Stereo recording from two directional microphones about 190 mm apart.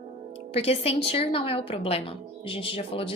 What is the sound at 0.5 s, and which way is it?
A woman's voice, 30° left (ahead or behind).